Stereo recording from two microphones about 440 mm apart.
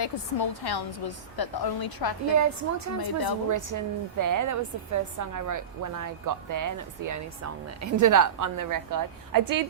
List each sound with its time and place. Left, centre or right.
0.0 s a woman's voice: left
2.3 s a woman's voice: right
3.0 s a woman's voice: left
3.5 s a woman's voice: right